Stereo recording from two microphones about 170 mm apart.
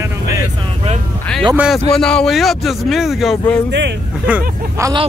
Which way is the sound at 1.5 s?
Centre (ahead or behind).